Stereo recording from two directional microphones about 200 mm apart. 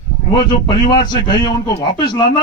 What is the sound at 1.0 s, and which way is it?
A man's voice, 20° left (ahead or behind).